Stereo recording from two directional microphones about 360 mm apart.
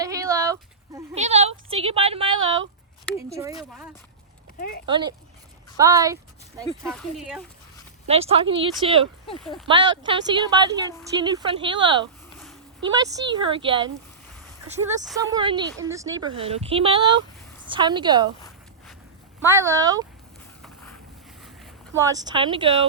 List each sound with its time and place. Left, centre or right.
0.0 s speech: centre
4.9 s speech: centre
8.0 s speech: centre
19.4 s speech: centre
21.4 s speech: centre